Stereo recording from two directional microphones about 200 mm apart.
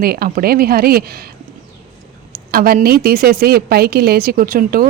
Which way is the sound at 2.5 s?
50° right (ahead or behind).